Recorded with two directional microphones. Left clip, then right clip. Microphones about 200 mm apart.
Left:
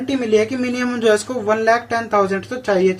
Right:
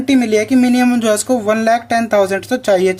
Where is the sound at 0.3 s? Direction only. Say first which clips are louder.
Right 1 dB; 50° right (ahead or behind).